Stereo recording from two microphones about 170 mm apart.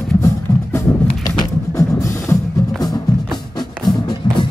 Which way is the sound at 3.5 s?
25° left (ahead or behind).